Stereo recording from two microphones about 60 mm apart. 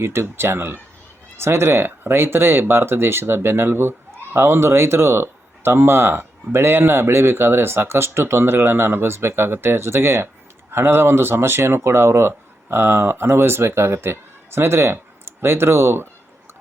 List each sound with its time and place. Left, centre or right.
0.0 s speech: right